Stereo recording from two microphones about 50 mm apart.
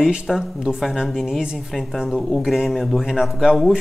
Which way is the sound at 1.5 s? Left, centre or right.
Centre.